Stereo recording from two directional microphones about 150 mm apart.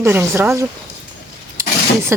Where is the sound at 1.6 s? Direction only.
20° right (ahead or behind).